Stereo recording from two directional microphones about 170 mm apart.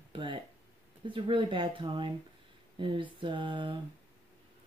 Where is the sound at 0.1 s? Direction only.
30° right (ahead or behind).